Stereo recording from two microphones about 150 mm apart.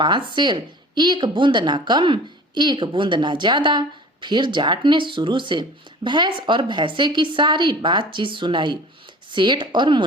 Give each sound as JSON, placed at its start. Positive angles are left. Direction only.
{"t": 0.3, "sound": "speech", "side_deg": -30}